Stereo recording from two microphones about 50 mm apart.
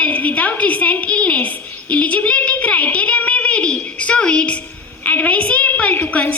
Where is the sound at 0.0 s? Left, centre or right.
Left.